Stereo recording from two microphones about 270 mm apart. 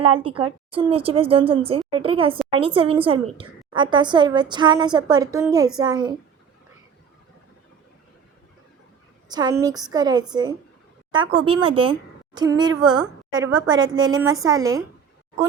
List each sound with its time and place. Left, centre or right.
0.0 s a woman's voice: centre
9.3 s a woman's voice: centre